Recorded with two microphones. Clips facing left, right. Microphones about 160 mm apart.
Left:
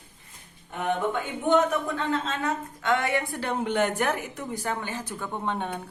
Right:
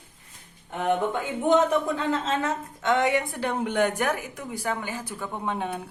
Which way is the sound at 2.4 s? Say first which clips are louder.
Right 1 dB; 20° right (ahead or behind).